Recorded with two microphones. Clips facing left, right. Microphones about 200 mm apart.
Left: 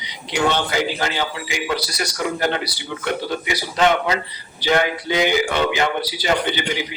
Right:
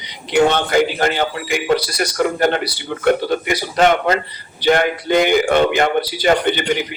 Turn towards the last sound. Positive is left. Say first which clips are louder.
# right 5 dB
turn(degrees=-55)  # may be behind; listen again after turning